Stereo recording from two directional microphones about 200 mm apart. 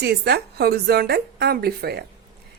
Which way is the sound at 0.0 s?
55° right (ahead or behind).